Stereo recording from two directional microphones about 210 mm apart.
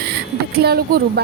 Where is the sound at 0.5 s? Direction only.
50° right (ahead or behind).